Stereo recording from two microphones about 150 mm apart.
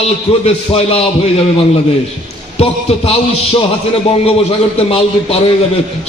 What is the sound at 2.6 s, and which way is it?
A man's voice, 40° left (ahead or behind).